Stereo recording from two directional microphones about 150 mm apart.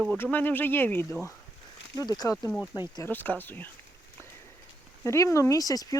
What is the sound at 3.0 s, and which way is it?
Speech, 10° left (ahead or behind).